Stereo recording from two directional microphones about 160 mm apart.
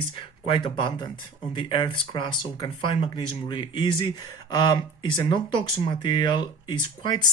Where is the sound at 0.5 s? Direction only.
30° left (ahead or behind).